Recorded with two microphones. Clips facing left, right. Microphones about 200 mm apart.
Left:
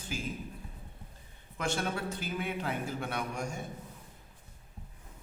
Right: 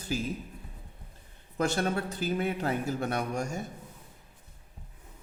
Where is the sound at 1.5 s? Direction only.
40° right (ahead or behind).